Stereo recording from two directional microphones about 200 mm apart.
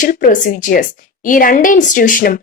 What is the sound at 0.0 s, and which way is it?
A woman's voice, 40° left (ahead or behind).